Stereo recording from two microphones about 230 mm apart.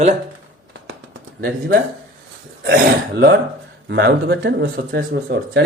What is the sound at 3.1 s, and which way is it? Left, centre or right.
Speech, right.